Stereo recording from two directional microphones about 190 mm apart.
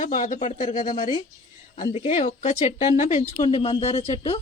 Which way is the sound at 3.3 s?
30° left (ahead or behind).